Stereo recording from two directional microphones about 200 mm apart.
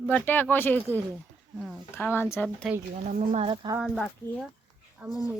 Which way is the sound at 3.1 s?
30° right (ahead or behind).